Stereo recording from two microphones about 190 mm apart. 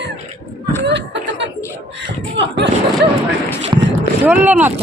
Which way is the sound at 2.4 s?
65° right (ahead or behind).